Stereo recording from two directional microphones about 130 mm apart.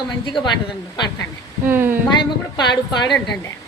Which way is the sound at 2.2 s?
35° left (ahead or behind).